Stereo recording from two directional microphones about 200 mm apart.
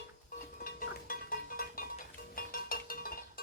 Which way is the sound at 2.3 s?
45° left (ahead or behind).